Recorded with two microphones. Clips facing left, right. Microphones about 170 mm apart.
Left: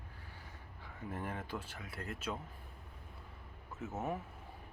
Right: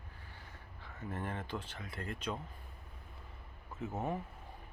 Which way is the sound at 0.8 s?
10° left (ahead or behind).